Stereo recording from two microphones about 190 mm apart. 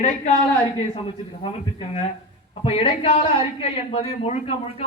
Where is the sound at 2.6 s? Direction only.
30° left (ahead or behind).